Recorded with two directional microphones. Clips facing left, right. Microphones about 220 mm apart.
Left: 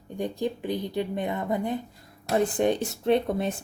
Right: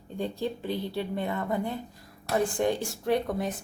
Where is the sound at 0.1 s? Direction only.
15° left (ahead or behind).